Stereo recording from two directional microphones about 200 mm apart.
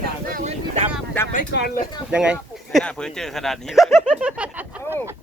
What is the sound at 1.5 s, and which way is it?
Speech, 55° left (ahead or behind).